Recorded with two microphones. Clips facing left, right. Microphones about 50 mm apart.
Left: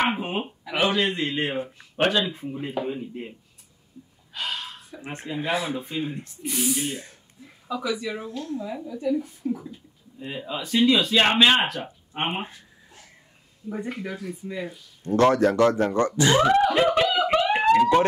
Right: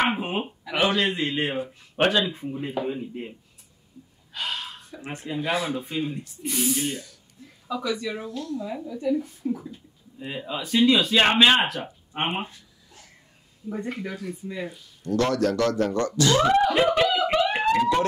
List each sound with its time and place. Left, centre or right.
0.0 s speech: centre
4.3 s gasp: centre
5.1 s speech: left
5.9 s speech: left
6.4 s speech: centre
7.0 s a sound: left
7.6 s speech: centre
8.3 s speech: left
8.6 s speech: centre
13.7 s speech: centre
15.0 s speech: left
17.1 s a sound: centre